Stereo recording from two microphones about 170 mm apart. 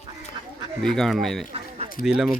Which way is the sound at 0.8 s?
Centre (ahead or behind).